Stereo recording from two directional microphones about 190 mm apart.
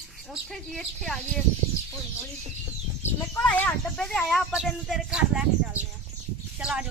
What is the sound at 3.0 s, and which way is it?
Speech, 10° left (ahead or behind).